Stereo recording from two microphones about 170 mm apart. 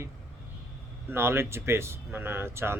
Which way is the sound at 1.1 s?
15° right (ahead or behind).